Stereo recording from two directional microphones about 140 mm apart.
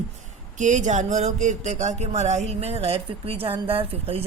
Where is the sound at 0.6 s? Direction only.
60° right (ahead or behind).